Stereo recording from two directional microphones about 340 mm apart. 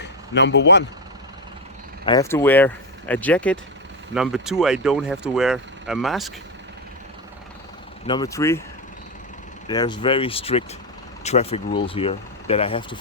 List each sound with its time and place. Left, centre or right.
0.0 s speech: left
2.0 s speech: centre
8.0 s speech: centre
9.6 s speech: centre